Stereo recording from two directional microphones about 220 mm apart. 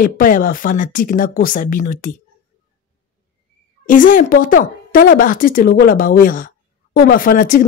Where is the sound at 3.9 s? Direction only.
35° left (ahead or behind).